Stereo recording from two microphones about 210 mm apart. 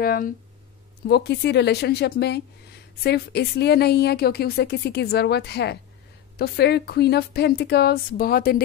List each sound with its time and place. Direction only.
0.0 s a woman's voice: 45° left (ahead or behind)